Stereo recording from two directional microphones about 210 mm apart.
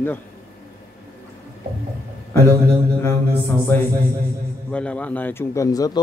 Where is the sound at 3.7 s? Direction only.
10° left (ahead or behind).